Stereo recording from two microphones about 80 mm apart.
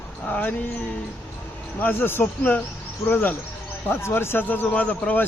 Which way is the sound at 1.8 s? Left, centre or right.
Left.